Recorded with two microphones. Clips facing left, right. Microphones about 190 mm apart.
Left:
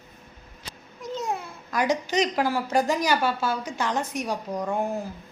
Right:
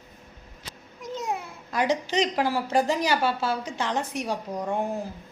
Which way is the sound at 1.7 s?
30° right (ahead or behind).